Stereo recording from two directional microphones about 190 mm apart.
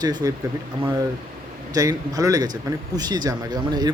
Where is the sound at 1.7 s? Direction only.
20° right (ahead or behind).